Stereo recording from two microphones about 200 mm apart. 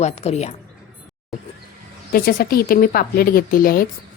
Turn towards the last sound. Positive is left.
turn(degrees=45)  # may be behind; listen again after turning